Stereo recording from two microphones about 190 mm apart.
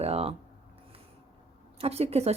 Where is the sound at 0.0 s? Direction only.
30° right (ahead or behind).